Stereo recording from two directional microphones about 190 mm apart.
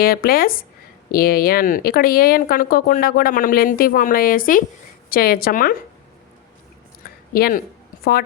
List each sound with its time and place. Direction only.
0.0 s speech: 50° left (ahead or behind)
7.3 s speech: 55° left (ahead or behind)